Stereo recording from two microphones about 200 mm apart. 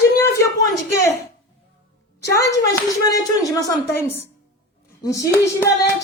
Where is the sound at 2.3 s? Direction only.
15° left (ahead or behind).